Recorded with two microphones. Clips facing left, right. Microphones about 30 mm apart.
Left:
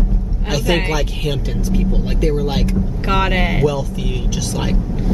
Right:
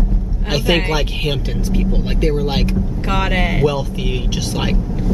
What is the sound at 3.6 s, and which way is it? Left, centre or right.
Speech, right.